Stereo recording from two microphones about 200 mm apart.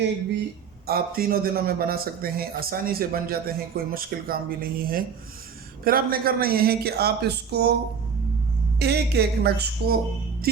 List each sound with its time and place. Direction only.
0.0 s speech: 60° right (ahead or behind)
0.9 s a man's voice: 50° right (ahead or behind)
8.8 s speech: 55° right (ahead or behind)